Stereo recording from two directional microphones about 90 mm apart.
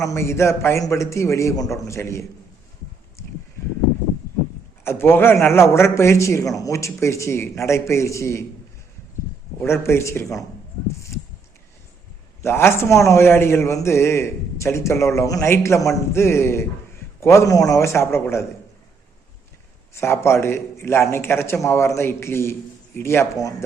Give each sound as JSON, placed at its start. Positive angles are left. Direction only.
{"t": 0.0, "sound": "a man's voice", "side_deg": 35}
{"t": 3.2, "sound": "a sound", "side_deg": 35}
{"t": 4.8, "sound": "a man's voice", "side_deg": 25}
{"t": 9.6, "sound": "a man's voice", "side_deg": 30}
{"t": 12.4, "sound": "a man's voice", "side_deg": 30}
{"t": 19.9, "sound": "a man's voice", "side_deg": 30}